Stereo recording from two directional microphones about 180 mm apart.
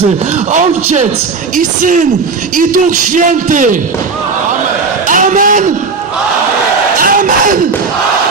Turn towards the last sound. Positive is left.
turn(degrees=-50)  # may be behind; listen again after turning